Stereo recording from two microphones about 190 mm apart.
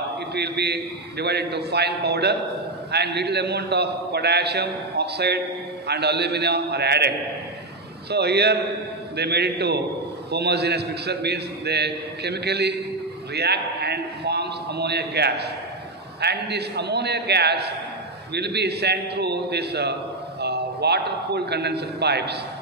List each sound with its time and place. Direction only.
0.3 s a man's voice: 60° right (ahead or behind)